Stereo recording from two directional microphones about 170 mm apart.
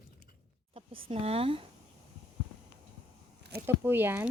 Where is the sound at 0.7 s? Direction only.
35° right (ahead or behind).